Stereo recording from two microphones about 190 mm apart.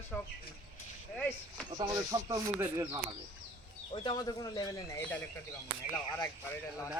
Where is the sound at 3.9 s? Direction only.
25° left (ahead or behind).